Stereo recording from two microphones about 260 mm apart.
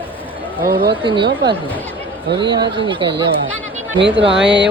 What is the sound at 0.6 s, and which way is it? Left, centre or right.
Speech, right.